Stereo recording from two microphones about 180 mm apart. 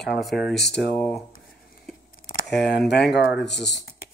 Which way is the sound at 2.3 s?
60° left (ahead or behind).